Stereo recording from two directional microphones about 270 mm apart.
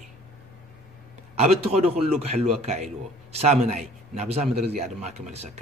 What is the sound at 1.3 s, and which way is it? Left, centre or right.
A man's voice, right.